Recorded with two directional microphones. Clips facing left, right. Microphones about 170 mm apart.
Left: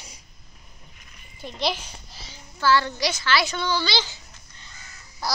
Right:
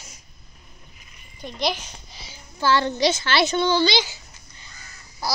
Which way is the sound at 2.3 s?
20° right (ahead or behind).